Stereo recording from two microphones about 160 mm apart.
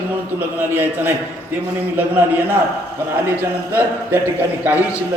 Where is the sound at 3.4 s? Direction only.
15° right (ahead or behind).